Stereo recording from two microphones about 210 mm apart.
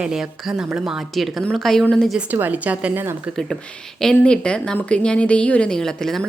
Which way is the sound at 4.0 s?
5° left (ahead or behind).